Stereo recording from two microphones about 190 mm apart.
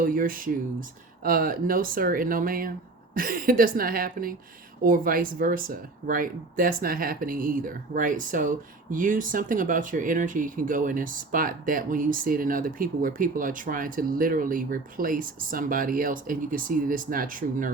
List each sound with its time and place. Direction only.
0.0 s speech: 45° right (ahead or behind)